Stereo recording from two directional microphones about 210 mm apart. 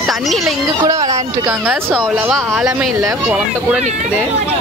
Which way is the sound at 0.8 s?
15° right (ahead or behind).